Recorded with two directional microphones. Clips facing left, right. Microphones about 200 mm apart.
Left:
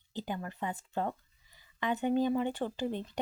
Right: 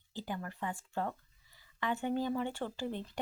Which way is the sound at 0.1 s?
20° left (ahead or behind).